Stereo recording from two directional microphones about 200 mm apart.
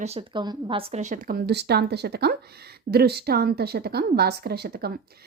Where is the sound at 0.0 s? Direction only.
30° right (ahead or behind).